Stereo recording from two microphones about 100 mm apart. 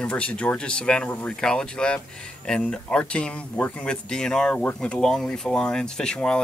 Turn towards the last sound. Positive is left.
turn(degrees=10)  # may be behind; listen again after turning